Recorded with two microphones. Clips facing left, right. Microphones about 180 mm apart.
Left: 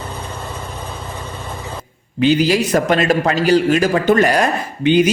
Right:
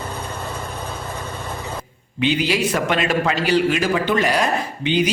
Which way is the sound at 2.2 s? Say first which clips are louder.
Left 5 dB; 40° left (ahead or behind).